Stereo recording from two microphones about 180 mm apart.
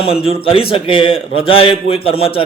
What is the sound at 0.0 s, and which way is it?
A man's voice, 30° left (ahead or behind).